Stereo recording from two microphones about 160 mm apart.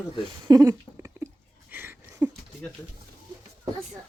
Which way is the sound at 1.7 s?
10° right (ahead or behind).